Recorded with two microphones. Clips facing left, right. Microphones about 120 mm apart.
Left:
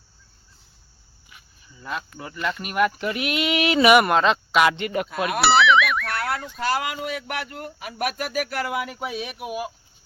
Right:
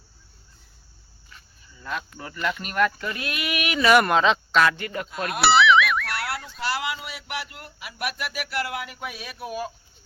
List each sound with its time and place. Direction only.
1.3 s speech: 10° left (ahead or behind); by 3.8 s 25° left (ahead or behind)
3.8 s speech: 5° left (ahead or behind)
4.6 s speech: 20° left (ahead or behind)
5.4 s a sound: centre (ahead or behind)
6.6 s speech: 45° left (ahead or behind)
9.0 s speech: 25° left (ahead or behind)